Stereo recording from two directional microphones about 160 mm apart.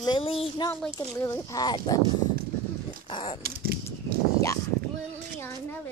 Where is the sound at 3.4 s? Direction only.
70° right (ahead or behind).